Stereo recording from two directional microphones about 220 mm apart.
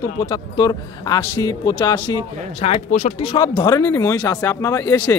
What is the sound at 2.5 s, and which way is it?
Speech, 30° left (ahead or behind).